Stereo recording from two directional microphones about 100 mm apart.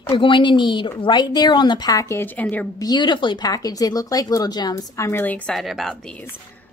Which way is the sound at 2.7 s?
45° left (ahead or behind).